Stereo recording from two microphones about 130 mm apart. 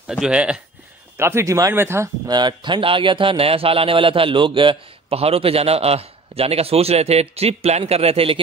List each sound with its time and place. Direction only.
0.0 s speech: 5° right (ahead or behind)
1.1 s speech: 20° right (ahead or behind)
2.2 s a man's voice: 35° right (ahead or behind)